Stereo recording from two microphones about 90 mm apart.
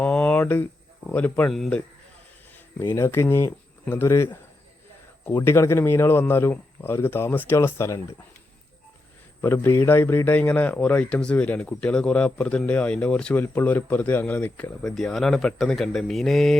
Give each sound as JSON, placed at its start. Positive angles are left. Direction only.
{"t": 0.0, "sound": "a sound", "side_deg": 10}
{"t": 1.0, "sound": "a man's voice", "side_deg": 20}
{"t": 1.5, "sound": "speech", "side_deg": 0}
{"t": 2.7, "sound": "a man's voice", "side_deg": 30}
{"t": 5.4, "sound": "a man's voice", "side_deg": 30}
{"t": 9.4, "sound": "a man's voice", "side_deg": 25}
{"t": 14.9, "sound": "speech", "side_deg": 5}